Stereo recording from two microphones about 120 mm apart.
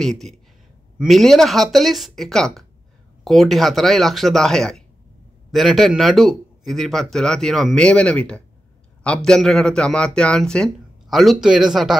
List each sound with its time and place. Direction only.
0.0 s a man's voice: 5° left (ahead or behind)